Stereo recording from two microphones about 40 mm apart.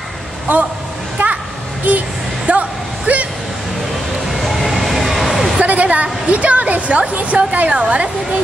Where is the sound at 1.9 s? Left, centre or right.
Right.